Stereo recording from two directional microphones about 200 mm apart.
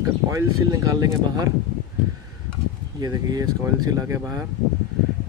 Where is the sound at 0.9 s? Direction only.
20° right (ahead or behind).